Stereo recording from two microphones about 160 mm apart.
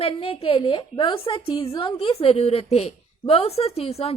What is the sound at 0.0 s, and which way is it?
A woman's voice, 35° left (ahead or behind).